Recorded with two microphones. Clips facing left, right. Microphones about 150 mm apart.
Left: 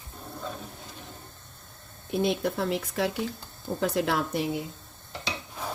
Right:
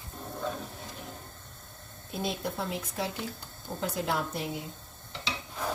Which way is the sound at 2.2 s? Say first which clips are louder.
Left 6 dB; 75° left (ahead or behind).